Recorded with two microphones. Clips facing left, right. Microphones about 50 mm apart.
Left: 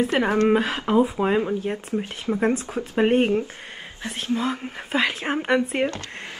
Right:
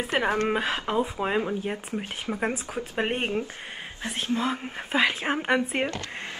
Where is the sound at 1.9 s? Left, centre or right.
Centre.